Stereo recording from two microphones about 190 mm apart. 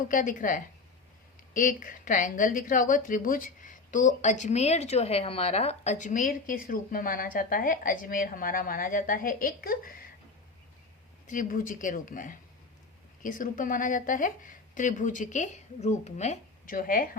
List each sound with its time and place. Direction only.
0.1 s a woman's voice: 45° left (ahead or behind)
11.3 s a woman's voice: 45° left (ahead or behind)